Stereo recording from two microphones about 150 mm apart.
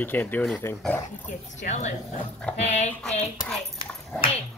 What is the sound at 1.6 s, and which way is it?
Speech, 50° left (ahead or behind).